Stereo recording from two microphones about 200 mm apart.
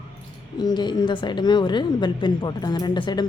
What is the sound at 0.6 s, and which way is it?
A woman's voice, 20° left (ahead or behind).